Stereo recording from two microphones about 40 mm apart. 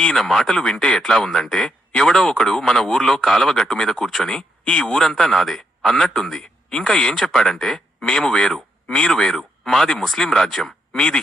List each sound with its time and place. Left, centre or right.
0.2 s speech: centre
0.5 s speech: left
8.0 s speech: centre